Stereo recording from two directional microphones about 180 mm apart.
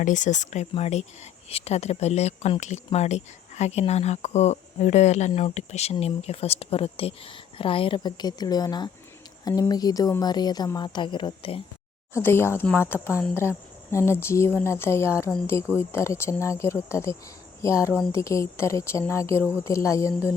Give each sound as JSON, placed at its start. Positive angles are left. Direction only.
{"t": 0.0, "sound": "speech", "side_deg": 45}
{"t": 12.1, "sound": "a woman's voice", "side_deg": 15}
{"t": 15.3, "sound": "a woman's voice", "side_deg": 5}